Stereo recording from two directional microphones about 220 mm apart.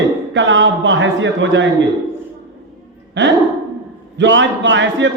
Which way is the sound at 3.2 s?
55° right (ahead or behind).